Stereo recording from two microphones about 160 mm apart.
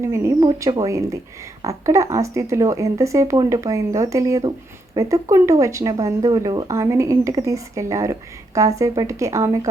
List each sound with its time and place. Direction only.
0.0 s speech: 15° right (ahead or behind)